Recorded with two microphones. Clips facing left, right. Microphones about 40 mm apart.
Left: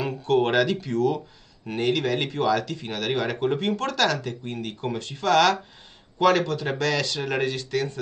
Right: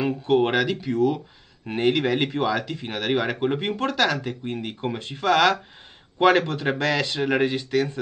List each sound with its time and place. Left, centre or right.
0.0 s speech: centre
1.7 s speech: right